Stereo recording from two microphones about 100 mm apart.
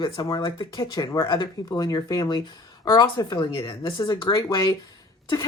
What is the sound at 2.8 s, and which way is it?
Speech, 50° left (ahead or behind).